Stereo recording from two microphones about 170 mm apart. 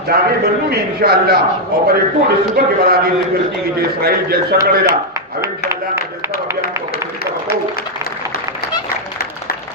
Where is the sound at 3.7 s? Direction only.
65° right (ahead or behind).